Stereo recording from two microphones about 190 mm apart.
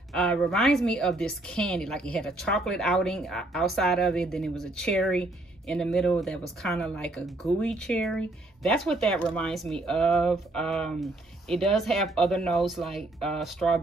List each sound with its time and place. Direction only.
0.1 s speech: 5° left (ahead or behind)